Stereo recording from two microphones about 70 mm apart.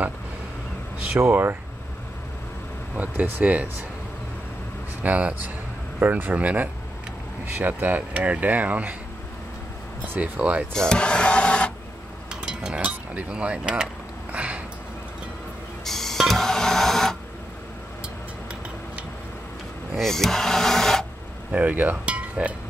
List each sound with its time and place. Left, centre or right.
1.2 s speech: right
3.0 s speech: right
5.0 s speech: right
10.0 s speech: right
10.7 s speech: centre
12.3 s a sound: centre
14.3 s sniff: centre
15.8 s printer: centre
20.0 s speech: centre
21.5 s speech: right